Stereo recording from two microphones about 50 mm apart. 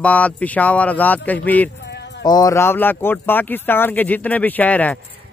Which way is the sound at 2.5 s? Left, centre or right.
Left.